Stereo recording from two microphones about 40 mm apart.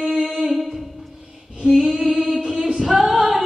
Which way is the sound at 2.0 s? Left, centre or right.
Centre.